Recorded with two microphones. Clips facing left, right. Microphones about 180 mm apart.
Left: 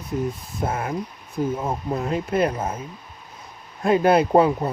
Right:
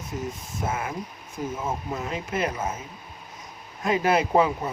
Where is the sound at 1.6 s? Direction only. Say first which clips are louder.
Left 4 dB; 35° left (ahead or behind).